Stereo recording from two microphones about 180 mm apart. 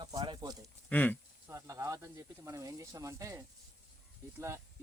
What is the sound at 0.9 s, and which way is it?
Speech, 10° left (ahead or behind).